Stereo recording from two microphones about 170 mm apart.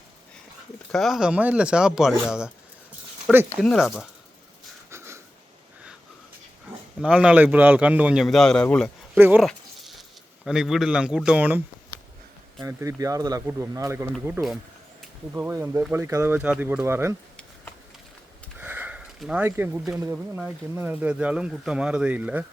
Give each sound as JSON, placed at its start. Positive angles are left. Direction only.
{"t": 0.9, "sound": "speech", "side_deg": 0}
{"t": 3.6, "sound": "speech", "side_deg": 0}
{"t": 4.9, "sound": "a sound", "side_deg": -15}
{"t": 7.0, "sound": "speech", "side_deg": -5}
{"t": 9.1, "sound": "speech", "side_deg": -10}
{"t": 9.4, "sound": "a sound", "side_deg": 0}
{"t": 10.4, "sound": "speech", "side_deg": -5}
{"t": 11.9, "sound": "a sound", "side_deg": 15}
{"t": 12.5, "sound": "speech", "side_deg": -20}
{"t": 15.3, "sound": "speech", "side_deg": -15}
{"t": 18.6, "sound": "sniff", "side_deg": -10}
{"t": 20.1, "sound": "speech", "side_deg": -10}